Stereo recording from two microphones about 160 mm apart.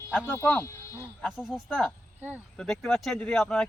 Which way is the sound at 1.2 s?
5° right (ahead or behind).